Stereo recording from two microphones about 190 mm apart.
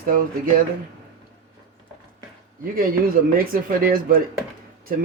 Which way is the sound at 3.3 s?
50° right (ahead or behind).